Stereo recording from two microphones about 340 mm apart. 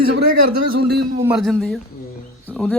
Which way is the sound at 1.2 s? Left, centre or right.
Centre.